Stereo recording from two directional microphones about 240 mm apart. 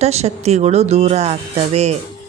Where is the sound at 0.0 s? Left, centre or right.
Right.